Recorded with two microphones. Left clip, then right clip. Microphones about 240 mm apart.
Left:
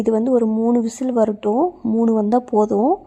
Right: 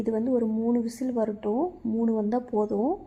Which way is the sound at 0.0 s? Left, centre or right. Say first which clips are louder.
Left 9 dB; left.